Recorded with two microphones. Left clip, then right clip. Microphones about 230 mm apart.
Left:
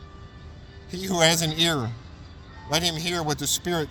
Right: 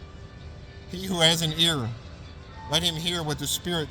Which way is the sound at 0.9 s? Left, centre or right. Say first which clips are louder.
Left 1 dB; left.